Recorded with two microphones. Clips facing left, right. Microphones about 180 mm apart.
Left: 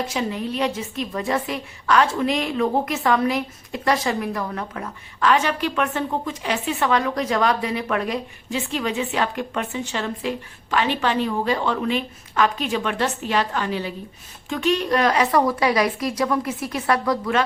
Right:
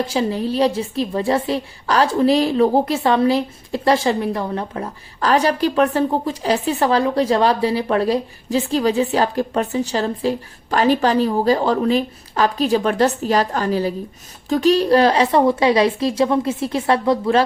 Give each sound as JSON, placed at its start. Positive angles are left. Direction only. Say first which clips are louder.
{"t": 0.0, "sound": "a woman's voice", "louder": "right 5 dB", "side_deg": -30}